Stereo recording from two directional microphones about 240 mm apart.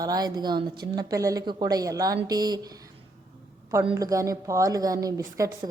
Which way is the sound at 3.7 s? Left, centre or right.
Centre.